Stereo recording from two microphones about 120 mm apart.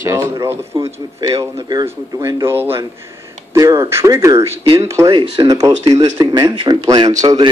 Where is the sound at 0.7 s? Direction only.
50° right (ahead or behind).